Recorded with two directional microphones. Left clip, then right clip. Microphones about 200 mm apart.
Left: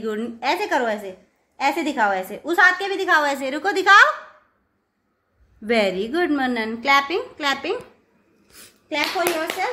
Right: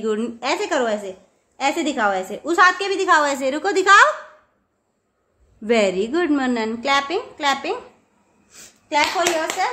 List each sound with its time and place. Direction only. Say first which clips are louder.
0.0 s a woman's voice: right 2 dB; 15° right (ahead or behind)
5.6 s a woman's voice: right 2 dB; 15° right (ahead or behind)
8.5 s a sound: right 5 dB; 20° right (ahead or behind)
9.2 s a woman's voice: right 2 dB; 10° right (ahead or behind)